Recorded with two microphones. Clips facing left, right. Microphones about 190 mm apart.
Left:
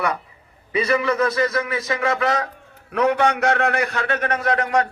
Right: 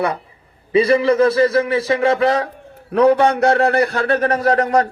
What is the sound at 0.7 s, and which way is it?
A man's voice, 30° right (ahead or behind).